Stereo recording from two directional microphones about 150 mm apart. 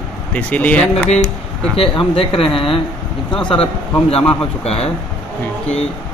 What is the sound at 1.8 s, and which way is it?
Speech, 40° left (ahead or behind).